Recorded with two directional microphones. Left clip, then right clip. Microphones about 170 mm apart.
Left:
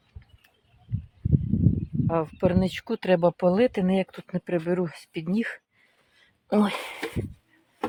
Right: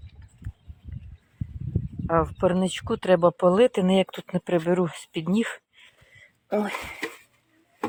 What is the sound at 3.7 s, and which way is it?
Speech, 10° right (ahead or behind).